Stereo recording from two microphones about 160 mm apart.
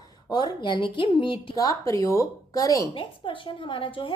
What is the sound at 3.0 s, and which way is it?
A woman's voice, 30° left (ahead or behind).